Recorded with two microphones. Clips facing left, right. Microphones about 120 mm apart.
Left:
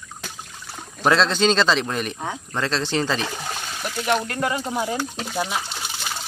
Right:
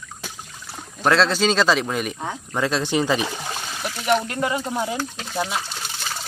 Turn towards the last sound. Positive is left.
turn(degrees=5)  # may be behind; listen again after turning